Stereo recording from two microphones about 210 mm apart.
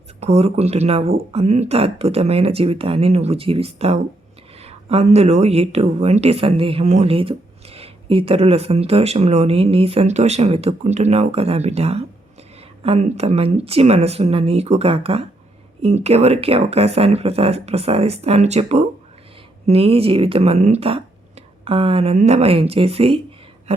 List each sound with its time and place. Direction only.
0.2 s speech: 30° right (ahead or behind)